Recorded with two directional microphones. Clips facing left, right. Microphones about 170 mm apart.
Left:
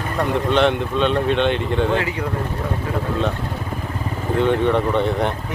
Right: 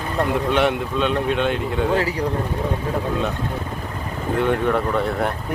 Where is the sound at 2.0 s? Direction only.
35° right (ahead or behind).